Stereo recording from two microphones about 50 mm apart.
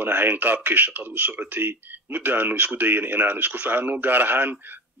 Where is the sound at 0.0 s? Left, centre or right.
Right.